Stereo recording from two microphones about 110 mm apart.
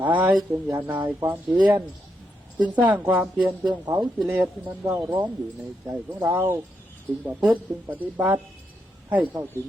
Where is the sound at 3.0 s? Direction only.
20° right (ahead or behind).